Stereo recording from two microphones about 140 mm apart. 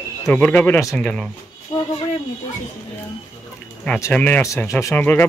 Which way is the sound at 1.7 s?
40° left (ahead or behind).